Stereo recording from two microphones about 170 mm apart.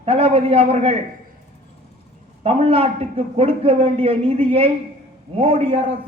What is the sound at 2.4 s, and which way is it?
A man's voice, 35° right (ahead or behind).